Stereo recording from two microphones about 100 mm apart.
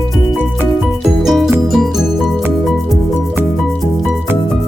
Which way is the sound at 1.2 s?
Centre (ahead or behind).